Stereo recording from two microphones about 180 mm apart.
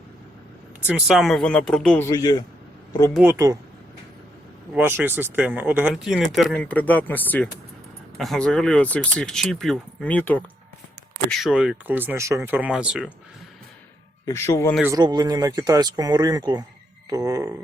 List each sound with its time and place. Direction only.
0.9 s speech: 5° right (ahead or behind)
2.0 s speech: 20° left (ahead or behind)
3.2 s speech: 20° right (ahead or behind)
4.7 s speech: 10° right (ahead or behind); by 10.4 s 10° left (ahead or behind)
11.3 s speech: centre (ahead or behind)
14.3 s speech: 15° left (ahead or behind)
14.9 s speech: 25° right (ahead or behind)